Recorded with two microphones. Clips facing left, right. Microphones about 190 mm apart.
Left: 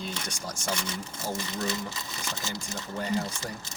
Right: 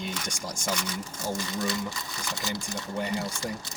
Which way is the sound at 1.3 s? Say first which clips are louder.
Right 2 dB; 25° left (ahead or behind).